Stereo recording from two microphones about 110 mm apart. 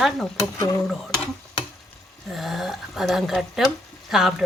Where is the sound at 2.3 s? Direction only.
Centre (ahead or behind).